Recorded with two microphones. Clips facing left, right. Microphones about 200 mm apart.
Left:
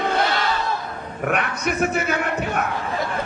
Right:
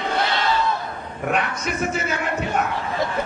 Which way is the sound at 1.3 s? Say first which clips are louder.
Left 1 dB; 60° left (ahead or behind).